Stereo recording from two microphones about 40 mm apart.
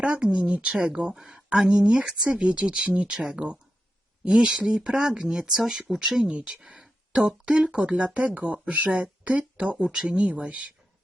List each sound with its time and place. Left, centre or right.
0.0 s speech: right
1.1 s speech: centre; by 9.4 s right
9.7 s speech: centre
10.2 s speech: right